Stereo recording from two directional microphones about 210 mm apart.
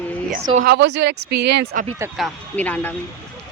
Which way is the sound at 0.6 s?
50° right (ahead or behind).